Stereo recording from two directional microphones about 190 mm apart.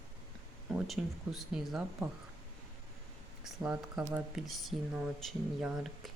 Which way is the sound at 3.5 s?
5° right (ahead or behind).